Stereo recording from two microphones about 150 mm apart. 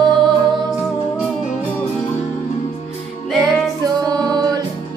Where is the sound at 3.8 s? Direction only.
25° right (ahead or behind).